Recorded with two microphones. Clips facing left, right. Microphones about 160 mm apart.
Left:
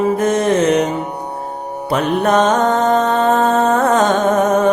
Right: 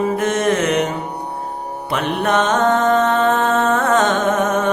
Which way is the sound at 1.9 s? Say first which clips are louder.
Left 4 dB; 40° left (ahead or behind).